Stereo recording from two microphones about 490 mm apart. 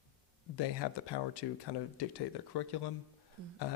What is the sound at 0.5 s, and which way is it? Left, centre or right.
Speech, left.